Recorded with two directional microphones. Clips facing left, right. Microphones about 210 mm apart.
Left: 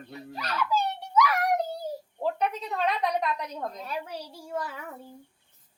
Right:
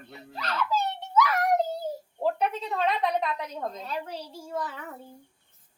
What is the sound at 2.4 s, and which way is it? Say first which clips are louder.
A woman's voice: right 1 dB; centre (ahead or behind).